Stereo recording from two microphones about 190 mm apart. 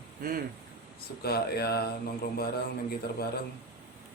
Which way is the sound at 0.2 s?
45° right (ahead or behind).